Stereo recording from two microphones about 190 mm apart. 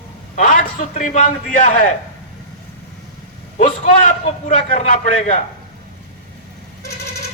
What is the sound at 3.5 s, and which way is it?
Speech, 40° left (ahead or behind).